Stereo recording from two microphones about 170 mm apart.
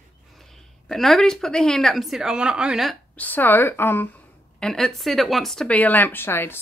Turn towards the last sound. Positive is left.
turn(degrees=15)  # may be behind; listen again after turning